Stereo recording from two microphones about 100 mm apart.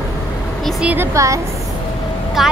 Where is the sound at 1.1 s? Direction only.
30° right (ahead or behind).